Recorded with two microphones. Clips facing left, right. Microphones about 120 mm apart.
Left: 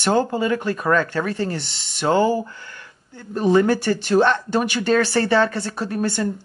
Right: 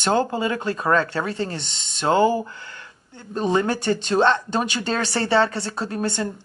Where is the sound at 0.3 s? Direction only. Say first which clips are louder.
Left 3 dB; 25° right (ahead or behind).